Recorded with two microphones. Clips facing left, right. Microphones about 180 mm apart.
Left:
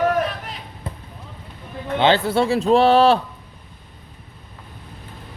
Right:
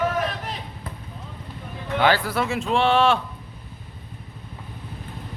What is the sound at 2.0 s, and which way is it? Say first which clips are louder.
Speech: left 4 dB; 25° left (ahead or behind).